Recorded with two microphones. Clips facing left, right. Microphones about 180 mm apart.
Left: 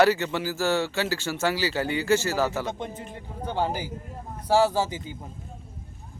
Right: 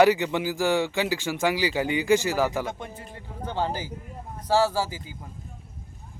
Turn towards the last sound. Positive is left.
turn(degrees=20)  # may be behind; listen again after turning